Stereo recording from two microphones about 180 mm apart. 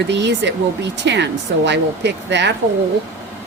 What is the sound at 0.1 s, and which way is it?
Speech, 75° right (ahead or behind).